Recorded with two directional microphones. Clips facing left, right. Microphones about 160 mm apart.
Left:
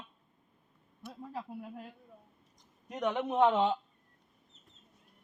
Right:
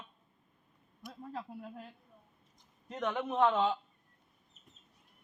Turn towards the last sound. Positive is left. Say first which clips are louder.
# left 2 dB
turn(degrees=20)  # may be behind; listen again after turning